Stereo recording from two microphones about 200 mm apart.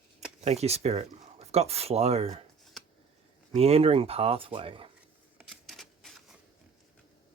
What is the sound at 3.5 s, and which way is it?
Speech, 30° right (ahead or behind).